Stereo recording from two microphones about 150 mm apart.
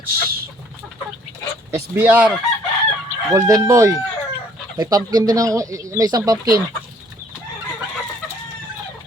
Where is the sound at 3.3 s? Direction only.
20° right (ahead or behind).